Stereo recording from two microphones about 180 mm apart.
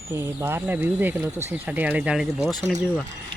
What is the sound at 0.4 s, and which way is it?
Speech, 10° right (ahead or behind).